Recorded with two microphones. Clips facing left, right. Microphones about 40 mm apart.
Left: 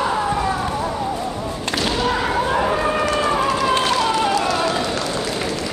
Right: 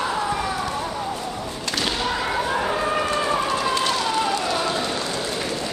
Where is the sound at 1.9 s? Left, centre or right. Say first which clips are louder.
Left 5 dB; centre.